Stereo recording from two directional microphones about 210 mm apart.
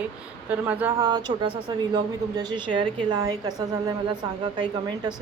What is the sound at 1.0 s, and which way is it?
Speech, 20° right (ahead or behind).